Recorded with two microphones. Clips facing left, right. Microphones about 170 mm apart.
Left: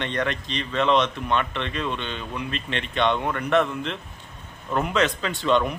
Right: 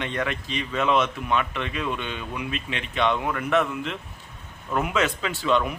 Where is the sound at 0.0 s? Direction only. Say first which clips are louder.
Left 2 dB; 5° right (ahead or behind).